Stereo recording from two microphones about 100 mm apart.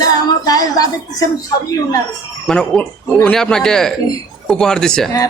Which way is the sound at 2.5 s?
15° left (ahead or behind).